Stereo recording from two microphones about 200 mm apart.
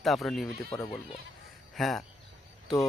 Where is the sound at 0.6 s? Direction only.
15° left (ahead or behind).